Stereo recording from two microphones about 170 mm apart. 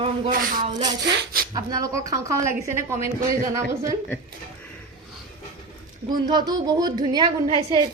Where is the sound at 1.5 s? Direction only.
20° right (ahead or behind).